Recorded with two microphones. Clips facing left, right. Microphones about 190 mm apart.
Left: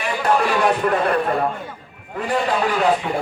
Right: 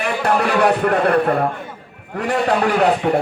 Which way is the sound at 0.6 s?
65° right (ahead or behind).